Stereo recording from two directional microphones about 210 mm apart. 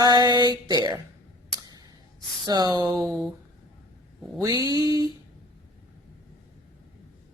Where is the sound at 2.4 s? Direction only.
20° right (ahead or behind).